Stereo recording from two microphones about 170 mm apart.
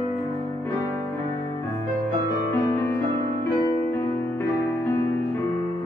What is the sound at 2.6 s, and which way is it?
Music, 15° left (ahead or behind).